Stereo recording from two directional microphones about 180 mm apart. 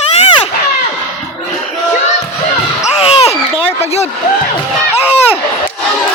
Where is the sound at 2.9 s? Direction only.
35° left (ahead or behind).